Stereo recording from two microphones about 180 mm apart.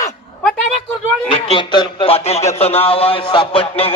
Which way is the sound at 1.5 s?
25° left (ahead or behind).